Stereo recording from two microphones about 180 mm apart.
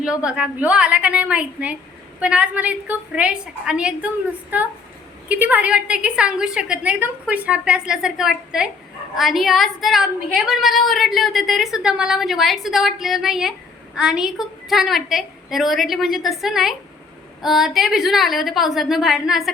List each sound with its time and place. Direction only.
0.3 s a woman's voice: 5° right (ahead or behind)
5.3 s a woman's voice: 10° right (ahead or behind)